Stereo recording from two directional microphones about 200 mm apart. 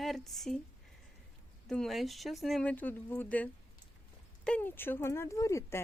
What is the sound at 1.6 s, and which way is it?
A woman's voice, centre (ahead or behind).